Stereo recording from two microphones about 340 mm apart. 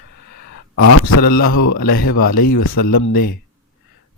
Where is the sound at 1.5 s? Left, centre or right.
Left.